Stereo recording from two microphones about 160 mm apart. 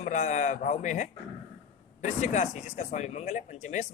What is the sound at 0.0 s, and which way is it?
Speech, 50° left (ahead or behind).